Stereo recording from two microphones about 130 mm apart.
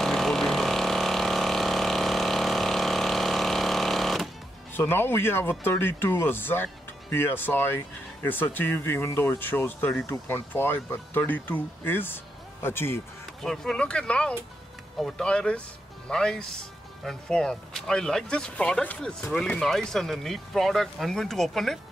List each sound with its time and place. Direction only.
0.0 s vehicle: centre (ahead or behind)
4.7 s speech: 15° left (ahead or behind)
13.4 s speech: 5° left (ahead or behind)